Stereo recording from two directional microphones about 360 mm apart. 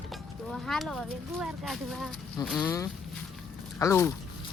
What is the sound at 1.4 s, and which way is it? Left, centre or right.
Speech, centre.